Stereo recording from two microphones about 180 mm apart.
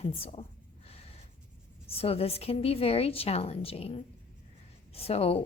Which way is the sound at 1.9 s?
35° left (ahead or behind).